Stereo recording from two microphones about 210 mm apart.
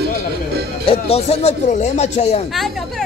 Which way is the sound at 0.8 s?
30° left (ahead or behind).